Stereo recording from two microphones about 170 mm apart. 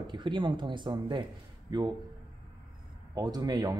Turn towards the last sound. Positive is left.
turn(degrees=-20)  # may be behind; listen again after turning